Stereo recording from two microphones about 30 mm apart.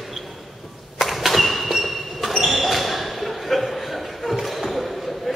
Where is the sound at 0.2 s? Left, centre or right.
Right.